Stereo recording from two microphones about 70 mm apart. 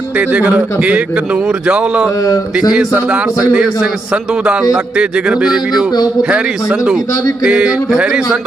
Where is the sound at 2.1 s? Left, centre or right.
Left.